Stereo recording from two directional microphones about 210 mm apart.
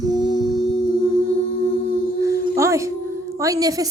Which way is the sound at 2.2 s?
15° right (ahead or behind).